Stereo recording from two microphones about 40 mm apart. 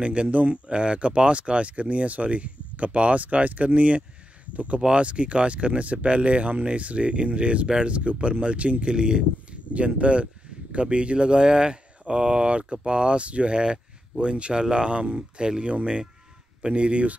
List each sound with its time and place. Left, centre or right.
0.0 s speech: right
7.6 s speech: centre
7.9 s speech: right
8.9 s speech: right